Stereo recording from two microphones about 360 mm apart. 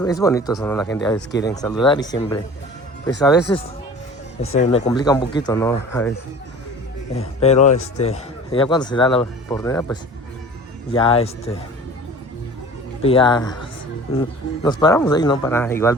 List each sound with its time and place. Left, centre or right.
0.0 s a man's voice: centre
7.2 s a man's voice: centre
13.0 s a man's voice: centre